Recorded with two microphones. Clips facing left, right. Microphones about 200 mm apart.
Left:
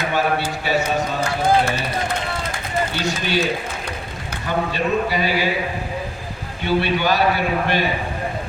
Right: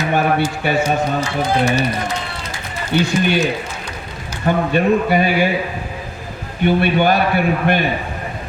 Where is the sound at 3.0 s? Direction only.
55° right (ahead or behind).